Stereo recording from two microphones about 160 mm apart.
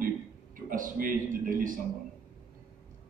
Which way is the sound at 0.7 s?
60° right (ahead or behind).